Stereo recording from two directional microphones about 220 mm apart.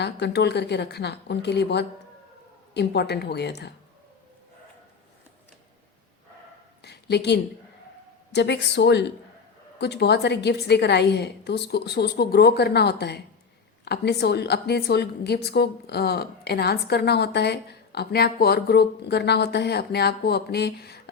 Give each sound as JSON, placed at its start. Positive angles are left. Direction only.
{"t": 0.0, "sound": "a woman's voice", "side_deg": 50}
{"t": 6.8, "sound": "a sound", "side_deg": 50}
{"t": 8.3, "sound": "a woman's voice", "side_deg": 50}